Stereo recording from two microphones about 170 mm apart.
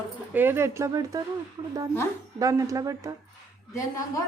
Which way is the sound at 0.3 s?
15° right (ahead or behind).